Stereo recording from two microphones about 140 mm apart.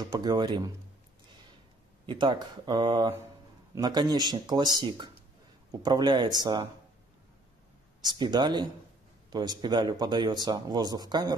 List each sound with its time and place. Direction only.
0.0 s speech: 30° right (ahead or behind)
2.0 s speech: 35° right (ahead or behind)
8.0 s speech: 30° right (ahead or behind)